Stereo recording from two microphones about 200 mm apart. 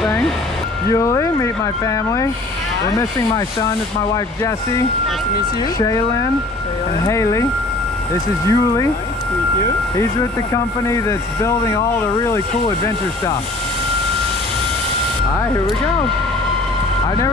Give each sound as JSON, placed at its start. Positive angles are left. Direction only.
{"t": 0.9, "sound": "speech", "side_deg": 15}
{"t": 5.8, "sound": "speech", "side_deg": 15}
{"t": 8.5, "sound": "speech", "side_deg": 15}
{"t": 10.5, "sound": "speech", "side_deg": 15}